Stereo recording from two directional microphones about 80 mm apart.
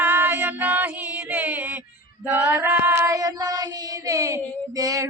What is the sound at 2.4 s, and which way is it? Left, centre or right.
Male singing, centre.